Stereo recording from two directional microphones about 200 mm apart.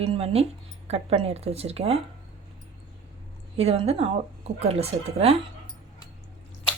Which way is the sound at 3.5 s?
30° right (ahead or behind).